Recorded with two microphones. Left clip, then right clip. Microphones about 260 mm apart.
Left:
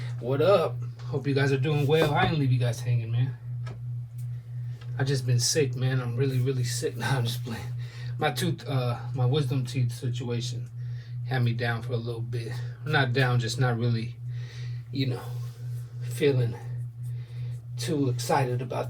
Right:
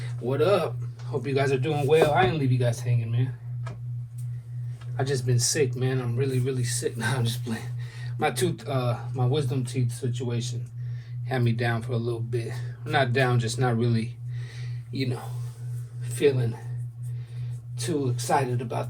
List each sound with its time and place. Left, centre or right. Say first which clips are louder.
0.0 s speech: even; right
4.9 s speech: right 3 dB; right
17.7 s speech: even; right